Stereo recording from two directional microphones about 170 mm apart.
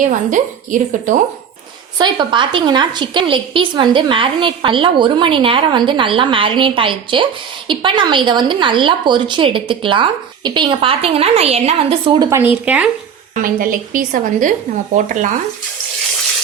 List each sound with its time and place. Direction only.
0.0 s speech: 50° right (ahead or behind)
2.0 s a woman's voice: 25° right (ahead or behind)
12.3 s speech: 10° right (ahead or behind)
13.3 s speech: 55° right (ahead or behind)